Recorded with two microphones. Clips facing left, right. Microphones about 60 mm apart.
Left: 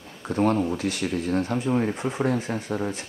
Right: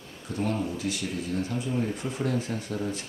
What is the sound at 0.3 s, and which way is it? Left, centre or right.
Speech, left.